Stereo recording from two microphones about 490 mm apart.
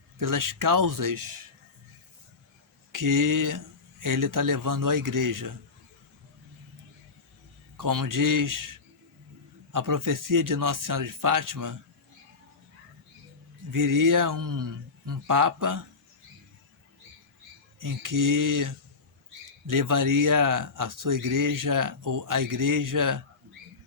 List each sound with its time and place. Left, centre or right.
0.2 s speech: right
2.9 s speech: right
7.8 s speech: right
9.7 s speech: right
13.7 s speech: right
17.7 s speech: right